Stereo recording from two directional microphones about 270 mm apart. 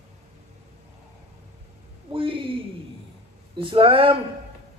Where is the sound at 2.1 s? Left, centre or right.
Centre.